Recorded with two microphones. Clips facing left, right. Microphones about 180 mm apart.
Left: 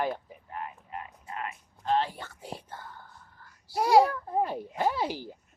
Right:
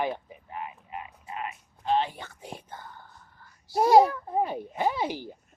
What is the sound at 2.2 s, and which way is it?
Speech, 5° left (ahead or behind).